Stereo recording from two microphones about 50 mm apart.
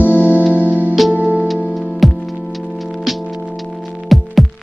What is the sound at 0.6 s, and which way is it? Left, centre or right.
Music, right.